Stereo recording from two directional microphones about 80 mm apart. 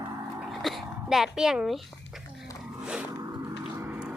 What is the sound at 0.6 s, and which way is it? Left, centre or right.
Speech, centre.